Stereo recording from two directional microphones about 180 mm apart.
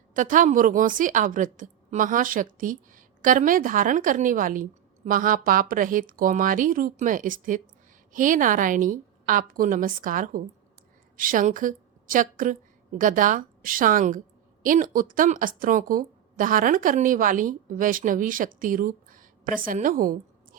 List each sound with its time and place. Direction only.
0.1 s a woman's voice: 45° right (ahead or behind)